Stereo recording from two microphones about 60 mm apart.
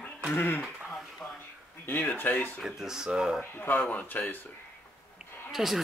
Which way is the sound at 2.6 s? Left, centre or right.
Centre.